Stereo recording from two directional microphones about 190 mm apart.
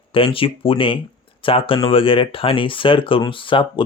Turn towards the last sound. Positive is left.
turn(degrees=25)  # may be behind; listen again after turning